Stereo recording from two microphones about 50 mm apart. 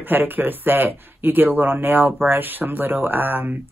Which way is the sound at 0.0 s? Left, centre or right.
Right.